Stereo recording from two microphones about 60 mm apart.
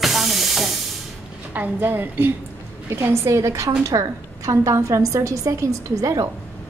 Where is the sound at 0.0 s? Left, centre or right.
Centre.